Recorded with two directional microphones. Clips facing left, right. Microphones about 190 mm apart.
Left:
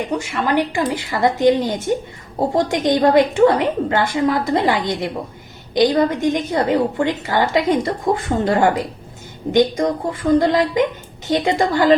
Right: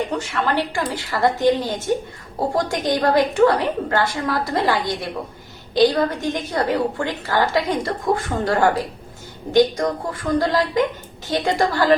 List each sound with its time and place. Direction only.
0.1 s a woman's voice: 10° left (ahead or behind)